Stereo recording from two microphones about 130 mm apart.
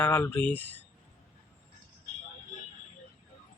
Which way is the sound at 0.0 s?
15° left (ahead or behind).